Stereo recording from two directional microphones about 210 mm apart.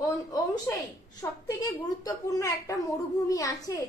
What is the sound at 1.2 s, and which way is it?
A woman's voice, 15° left (ahead or behind).